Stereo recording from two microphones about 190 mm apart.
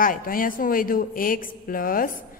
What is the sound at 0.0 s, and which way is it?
A woman's voice, 45° left (ahead or behind).